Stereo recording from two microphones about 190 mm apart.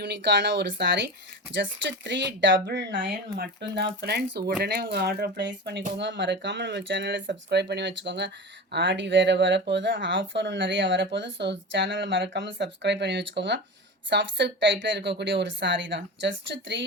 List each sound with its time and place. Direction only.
0.0 s speech: 65° right (ahead or behind)